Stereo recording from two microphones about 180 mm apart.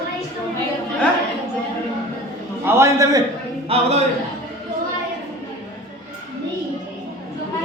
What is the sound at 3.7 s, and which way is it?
Speech, 35° right (ahead or behind).